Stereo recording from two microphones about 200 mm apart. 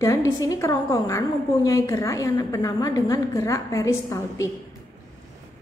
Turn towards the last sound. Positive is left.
turn(degrees=15)  # may be behind; listen again after turning